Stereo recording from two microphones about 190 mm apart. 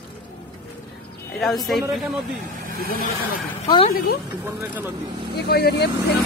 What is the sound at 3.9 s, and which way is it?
Speech, 50° left (ahead or behind).